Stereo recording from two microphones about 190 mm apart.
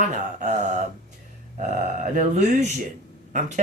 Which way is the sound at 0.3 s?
35° right (ahead or behind).